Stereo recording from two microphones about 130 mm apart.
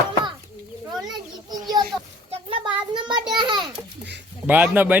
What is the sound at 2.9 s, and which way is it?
Speech, 35° right (ahead or behind).